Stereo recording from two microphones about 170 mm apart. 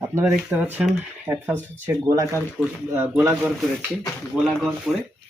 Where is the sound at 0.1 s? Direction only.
10° right (ahead or behind).